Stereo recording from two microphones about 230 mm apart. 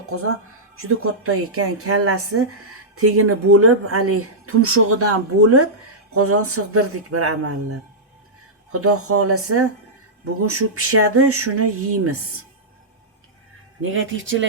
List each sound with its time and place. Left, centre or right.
0.1 s a woman's voice: right
8.8 s a woman's voice: right
13.8 s speech: right